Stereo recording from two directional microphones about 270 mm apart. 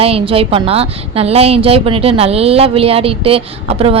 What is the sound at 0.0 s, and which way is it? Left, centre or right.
A woman's voice, right.